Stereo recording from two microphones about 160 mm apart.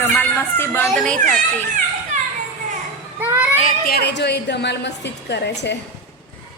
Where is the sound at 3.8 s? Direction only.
85° left.